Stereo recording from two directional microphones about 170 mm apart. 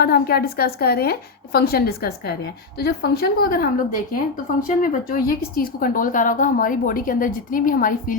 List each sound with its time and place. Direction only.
0.0 s a woman's voice: 65° left (ahead or behind)